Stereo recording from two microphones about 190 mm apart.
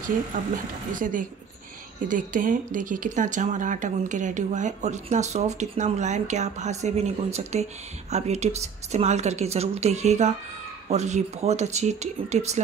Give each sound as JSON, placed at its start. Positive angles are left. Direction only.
{"t": 0.3, "sound": "speech", "side_deg": -45}